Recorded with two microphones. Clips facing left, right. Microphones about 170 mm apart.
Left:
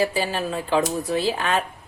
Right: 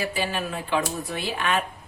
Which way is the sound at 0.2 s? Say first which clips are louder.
Left 3 dB; 35° left (ahead or behind).